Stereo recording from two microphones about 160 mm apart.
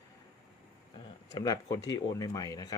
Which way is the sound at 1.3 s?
25° left (ahead or behind).